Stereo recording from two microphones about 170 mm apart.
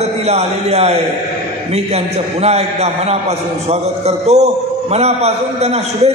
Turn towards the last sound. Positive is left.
turn(degrees=-40)  # may be behind; listen again after turning